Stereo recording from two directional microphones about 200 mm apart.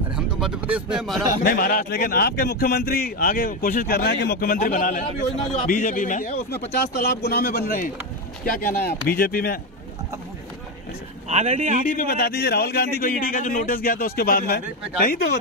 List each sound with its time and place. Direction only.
0.1 s speech: 5° right (ahead or behind)
1.4 s a man's voice: 45° left (ahead or behind)
6.7 s a man's voice: 55° left (ahead or behind)
11.2 s speech: 35° right (ahead or behind)
11.8 s a man's voice: 45° left (ahead or behind)